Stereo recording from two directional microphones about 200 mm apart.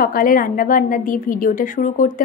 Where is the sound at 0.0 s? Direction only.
45° left (ahead or behind).